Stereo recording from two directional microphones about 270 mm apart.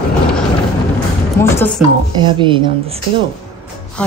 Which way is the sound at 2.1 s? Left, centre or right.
Centre.